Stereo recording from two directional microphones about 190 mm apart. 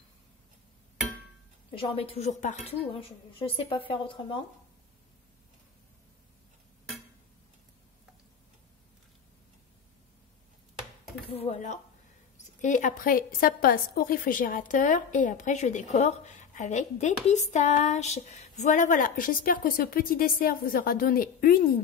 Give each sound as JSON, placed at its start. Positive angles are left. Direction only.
{"t": 1.8, "sound": "a woman's voice", "side_deg": 30}
{"t": 11.2, "sound": "a woman's voice", "side_deg": 35}